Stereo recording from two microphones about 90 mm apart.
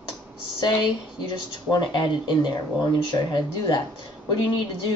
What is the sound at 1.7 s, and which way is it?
Speech, 60° left (ahead or behind).